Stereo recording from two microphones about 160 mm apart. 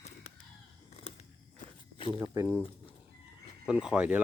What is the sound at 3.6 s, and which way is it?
Speech, 5° right (ahead or behind).